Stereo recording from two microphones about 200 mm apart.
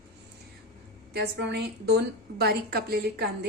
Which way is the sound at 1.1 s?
55° right (ahead or behind).